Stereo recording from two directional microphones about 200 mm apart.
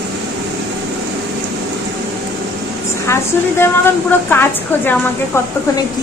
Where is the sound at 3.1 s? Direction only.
10° left (ahead or behind).